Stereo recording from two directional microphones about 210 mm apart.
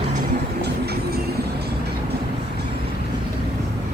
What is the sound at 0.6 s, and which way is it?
Music, 50° right (ahead or behind).